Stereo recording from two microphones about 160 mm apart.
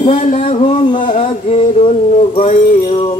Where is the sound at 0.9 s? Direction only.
50° left (ahead or behind).